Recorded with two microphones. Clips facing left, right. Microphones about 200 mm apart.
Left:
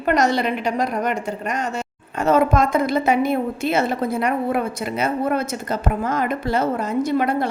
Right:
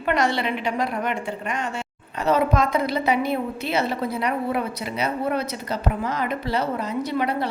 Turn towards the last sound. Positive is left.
turn(degrees=45)  # may be behind; listen again after turning